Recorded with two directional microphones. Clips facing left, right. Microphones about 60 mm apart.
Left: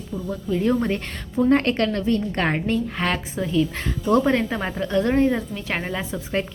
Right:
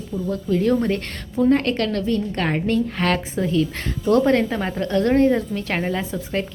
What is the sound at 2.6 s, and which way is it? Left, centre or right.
A woman's voice, centre.